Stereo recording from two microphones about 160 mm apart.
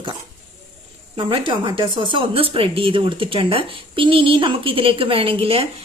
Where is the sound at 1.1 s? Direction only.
30° right (ahead or behind).